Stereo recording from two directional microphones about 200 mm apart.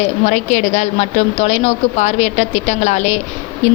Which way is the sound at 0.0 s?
35° left (ahead or behind).